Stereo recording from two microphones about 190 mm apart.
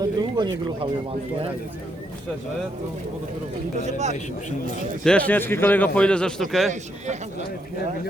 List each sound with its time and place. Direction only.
0.0 s a sound: 20° right (ahead or behind)
3.8 s speech: 35° right (ahead or behind)
5.0 s a man's voice: 5° left (ahead or behind)